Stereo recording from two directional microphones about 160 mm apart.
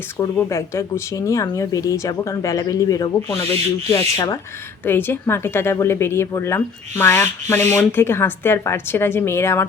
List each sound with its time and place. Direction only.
0.2 s speech: 15° left (ahead or behind)